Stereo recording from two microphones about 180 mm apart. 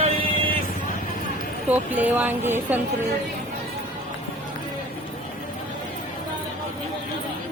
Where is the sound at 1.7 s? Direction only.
10° right (ahead or behind).